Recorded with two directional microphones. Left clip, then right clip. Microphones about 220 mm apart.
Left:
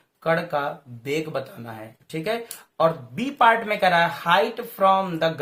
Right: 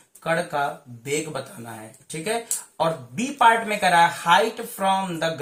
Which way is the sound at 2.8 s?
40° left (ahead or behind).